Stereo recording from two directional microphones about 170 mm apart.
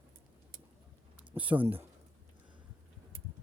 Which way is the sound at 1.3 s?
10° right (ahead or behind).